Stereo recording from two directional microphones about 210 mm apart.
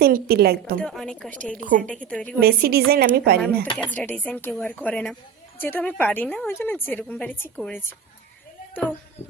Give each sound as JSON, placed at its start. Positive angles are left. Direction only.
{"t": 0.0, "sound": "a woman's voice", "side_deg": -45}
{"t": 0.8, "sound": "a woman's voice", "side_deg": 5}
{"t": 2.4, "sound": "a woman's voice", "side_deg": -45}
{"t": 3.8, "sound": "a woman's voice", "side_deg": 5}